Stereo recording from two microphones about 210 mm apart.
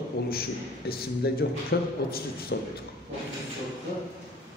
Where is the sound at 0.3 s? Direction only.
45° left (ahead or behind).